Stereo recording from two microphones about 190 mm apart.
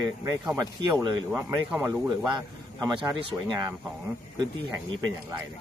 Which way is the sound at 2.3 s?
20° right (ahead or behind).